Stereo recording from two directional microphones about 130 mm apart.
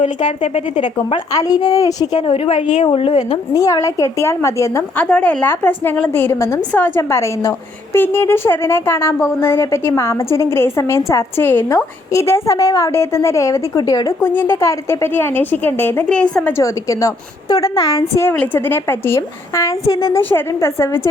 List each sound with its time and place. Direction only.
0.3 s speech: 60° left (ahead or behind)
1.3 s a woman's voice: 30° left (ahead or behind)
2.1 s speech: 50° left (ahead or behind)
3.5 s a woman's voice: 25° left (ahead or behind)
14.2 s a woman's voice: 15° left (ahead or behind)